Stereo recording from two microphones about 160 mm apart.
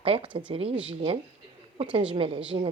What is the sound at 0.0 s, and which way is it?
Speech, 35° right (ahead or behind).